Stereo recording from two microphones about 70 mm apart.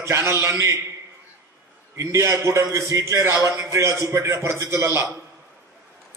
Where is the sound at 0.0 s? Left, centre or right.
Right.